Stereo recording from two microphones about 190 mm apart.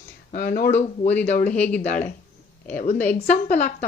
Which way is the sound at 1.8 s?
45° left (ahead or behind).